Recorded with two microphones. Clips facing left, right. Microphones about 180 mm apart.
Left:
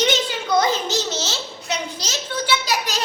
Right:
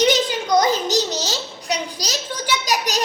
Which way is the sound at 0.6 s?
40° right (ahead or behind).